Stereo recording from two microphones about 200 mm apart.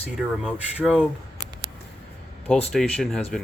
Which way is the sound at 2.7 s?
Centre (ahead or behind).